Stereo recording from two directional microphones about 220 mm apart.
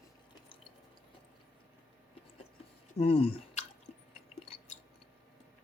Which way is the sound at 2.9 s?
25° left (ahead or behind).